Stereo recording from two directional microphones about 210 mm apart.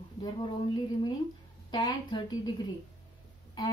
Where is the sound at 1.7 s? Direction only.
20° left (ahead or behind).